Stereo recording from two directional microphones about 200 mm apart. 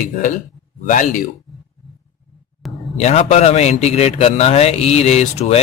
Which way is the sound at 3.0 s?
35° left (ahead or behind).